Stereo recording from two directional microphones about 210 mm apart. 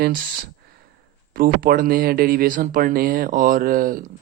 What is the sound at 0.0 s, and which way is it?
Speech, 45° right (ahead or behind).